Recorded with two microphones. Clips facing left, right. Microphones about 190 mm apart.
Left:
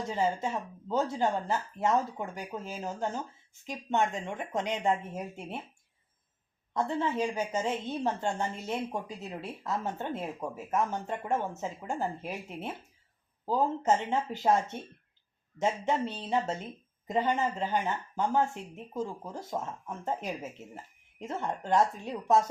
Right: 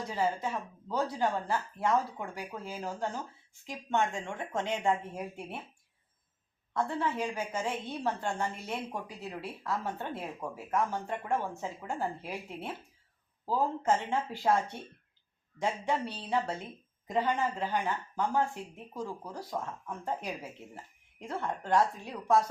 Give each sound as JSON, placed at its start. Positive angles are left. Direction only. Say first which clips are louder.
{"t": 0.2, "sound": "a woman's voice", "louder": "left 1 dB", "side_deg": 25}
{"t": 6.7, "sound": "a woman's voice", "louder": "left 2 dB", "side_deg": 20}